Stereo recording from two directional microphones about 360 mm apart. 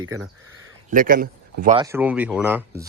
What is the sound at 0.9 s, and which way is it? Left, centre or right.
Speech, right.